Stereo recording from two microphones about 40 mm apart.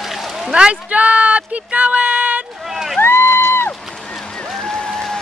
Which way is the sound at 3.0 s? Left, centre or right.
Left.